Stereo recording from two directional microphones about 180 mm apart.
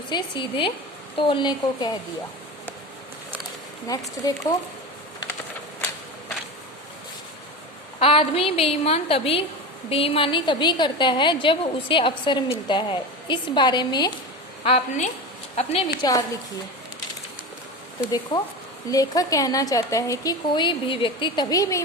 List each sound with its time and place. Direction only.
0.1 s a woman's voice: 25° left (ahead or behind)
3.8 s a woman's voice: 20° left (ahead or behind)
7.9 s a woman's voice: 30° left (ahead or behind)
14.6 s a woman's voice: 35° left (ahead or behind)
16.0 s a woman's voice: 20° left (ahead or behind)
18.1 s a woman's voice: 20° left (ahead or behind)